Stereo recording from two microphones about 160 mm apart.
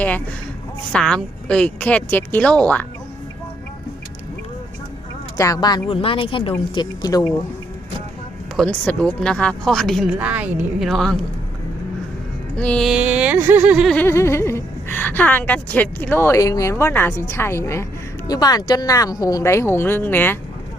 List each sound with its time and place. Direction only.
0.9 s a woman's voice: 5° left (ahead or behind)
5.4 s speech: 25° left (ahead or behind)
6.7 s speech: 25° left (ahead or behind)
8.5 s speech: 5° left (ahead or behind)
10.1 s speech: 10° right (ahead or behind)
10.8 s speech: centre (ahead or behind)
12.5 s speech: 5° left (ahead or behind)
13.9 s a woman's voice: 15° left (ahead or behind)